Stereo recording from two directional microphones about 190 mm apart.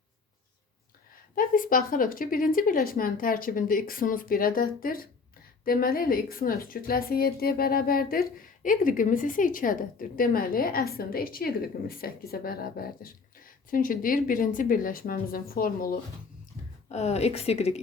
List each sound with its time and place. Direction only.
1.4 s a woman's voice: 45° left (ahead or behind)
16.9 s a woman's voice: 35° left (ahead or behind)